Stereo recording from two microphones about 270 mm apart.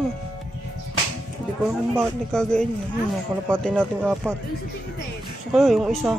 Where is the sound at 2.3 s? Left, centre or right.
Centre.